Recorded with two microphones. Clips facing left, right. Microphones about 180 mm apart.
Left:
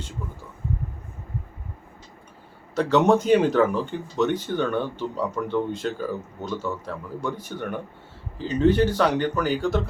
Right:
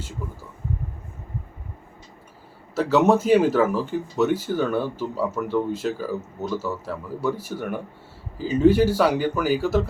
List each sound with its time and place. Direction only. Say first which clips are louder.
2.7 s speech: right 1 dB; 5° right (ahead or behind)